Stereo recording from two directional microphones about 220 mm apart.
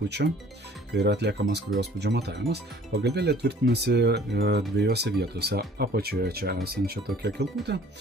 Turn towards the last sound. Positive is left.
turn(degrees=-50)  # may be behind; listen again after turning